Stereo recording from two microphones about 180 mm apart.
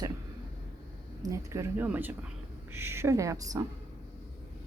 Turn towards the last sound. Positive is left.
turn(degrees=-20)  # may be behind; listen again after turning